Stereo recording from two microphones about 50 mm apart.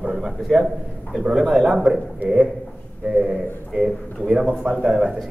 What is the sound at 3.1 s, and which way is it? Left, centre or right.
A man's voice, centre.